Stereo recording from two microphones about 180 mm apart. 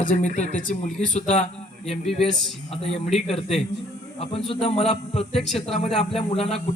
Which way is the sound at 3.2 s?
35° left (ahead or behind).